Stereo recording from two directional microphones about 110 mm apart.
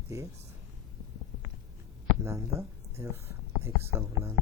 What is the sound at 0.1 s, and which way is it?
Speech, 25° right (ahead or behind).